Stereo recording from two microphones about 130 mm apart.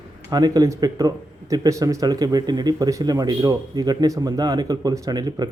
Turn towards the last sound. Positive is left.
turn(degrees=-30)  # may be behind; listen again after turning